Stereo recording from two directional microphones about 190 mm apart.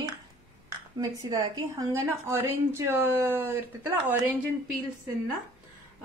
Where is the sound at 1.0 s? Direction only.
15° right (ahead or behind).